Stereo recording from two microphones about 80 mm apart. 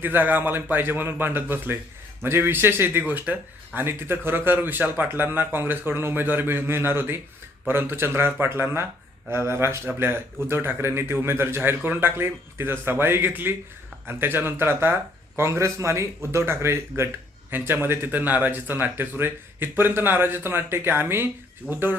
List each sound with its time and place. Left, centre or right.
0.0 s speech: right